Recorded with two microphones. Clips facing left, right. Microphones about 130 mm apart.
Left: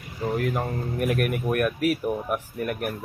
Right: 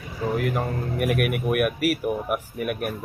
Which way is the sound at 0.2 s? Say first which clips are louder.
Right 1 dB; centre (ahead or behind).